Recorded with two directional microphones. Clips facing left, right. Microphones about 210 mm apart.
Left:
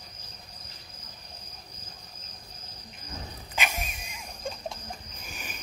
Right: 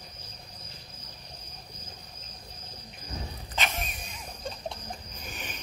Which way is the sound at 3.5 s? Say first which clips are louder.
Even; 10° left (ahead or behind).